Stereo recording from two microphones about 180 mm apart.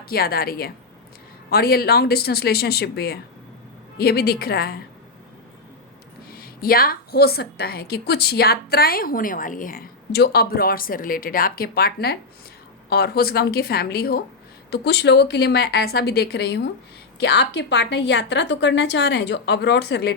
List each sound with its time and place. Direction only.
0.0 s a woman's voice: 55° left (ahead or behind)
6.3 s a woman's voice: 55° left (ahead or behind)